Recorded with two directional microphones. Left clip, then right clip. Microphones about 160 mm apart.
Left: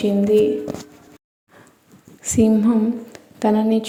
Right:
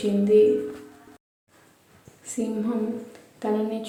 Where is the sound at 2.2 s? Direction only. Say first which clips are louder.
Left 11 dB; 55° left (ahead or behind).